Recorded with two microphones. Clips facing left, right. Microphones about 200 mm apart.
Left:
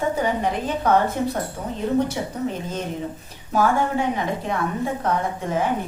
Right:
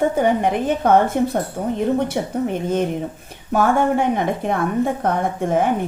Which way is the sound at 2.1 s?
60° right (ahead or behind).